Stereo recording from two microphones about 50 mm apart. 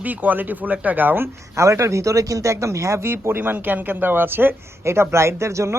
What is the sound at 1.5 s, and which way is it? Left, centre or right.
Speech, right.